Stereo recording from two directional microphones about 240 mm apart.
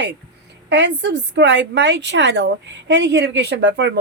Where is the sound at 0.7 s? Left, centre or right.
Right.